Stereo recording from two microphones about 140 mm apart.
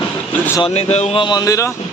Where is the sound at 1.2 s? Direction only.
25° left (ahead or behind).